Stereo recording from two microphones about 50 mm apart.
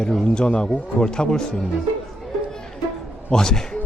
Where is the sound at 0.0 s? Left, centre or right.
Centre.